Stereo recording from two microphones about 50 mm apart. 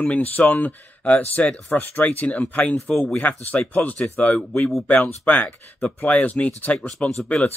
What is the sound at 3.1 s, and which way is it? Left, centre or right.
Speech, left.